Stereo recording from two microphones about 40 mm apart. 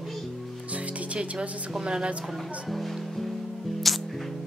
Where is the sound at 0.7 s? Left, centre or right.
Right.